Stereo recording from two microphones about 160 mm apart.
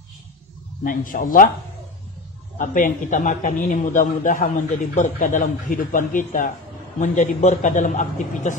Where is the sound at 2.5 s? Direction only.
55° left (ahead or behind).